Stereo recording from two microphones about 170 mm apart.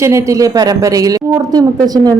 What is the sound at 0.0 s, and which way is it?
Speech, 15° right (ahead or behind).